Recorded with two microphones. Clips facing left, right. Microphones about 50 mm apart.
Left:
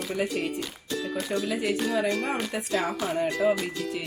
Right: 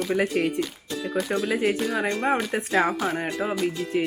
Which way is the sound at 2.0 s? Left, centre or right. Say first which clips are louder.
Right 3 dB; right.